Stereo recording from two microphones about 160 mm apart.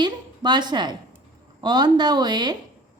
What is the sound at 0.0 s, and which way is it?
A woman's voice, 25° right (ahead or behind).